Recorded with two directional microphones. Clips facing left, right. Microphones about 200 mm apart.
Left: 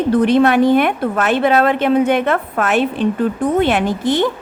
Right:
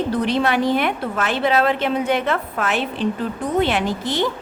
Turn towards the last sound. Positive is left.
turn(degrees=55)  # may be behind; listen again after turning